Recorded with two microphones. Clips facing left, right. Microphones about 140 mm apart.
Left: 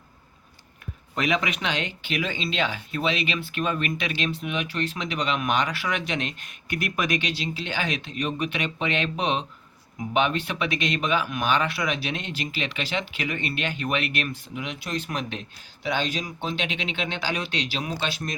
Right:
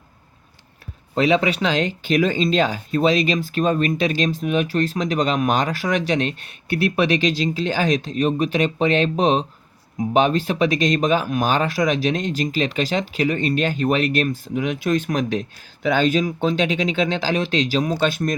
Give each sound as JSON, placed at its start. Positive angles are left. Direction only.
{"t": 1.1, "sound": "speech", "side_deg": -30}